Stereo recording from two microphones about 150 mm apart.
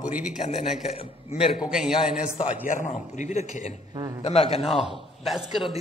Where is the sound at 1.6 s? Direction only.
5° right (ahead or behind).